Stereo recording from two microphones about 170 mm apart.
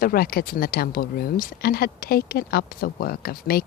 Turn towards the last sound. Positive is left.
turn(degrees=60)  # may be behind; listen again after turning